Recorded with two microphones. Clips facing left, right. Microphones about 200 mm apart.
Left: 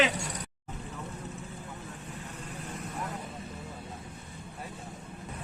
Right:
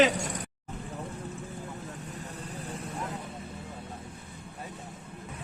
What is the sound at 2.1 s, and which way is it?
Vehicle, 35° right (ahead or behind).